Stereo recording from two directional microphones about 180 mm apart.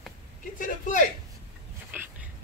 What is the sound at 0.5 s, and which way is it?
Speech, 45° left (ahead or behind).